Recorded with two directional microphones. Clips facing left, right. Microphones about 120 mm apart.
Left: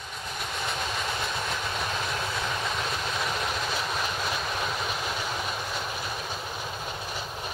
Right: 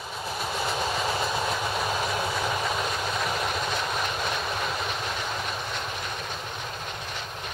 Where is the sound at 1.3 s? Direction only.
25° right (ahead or behind).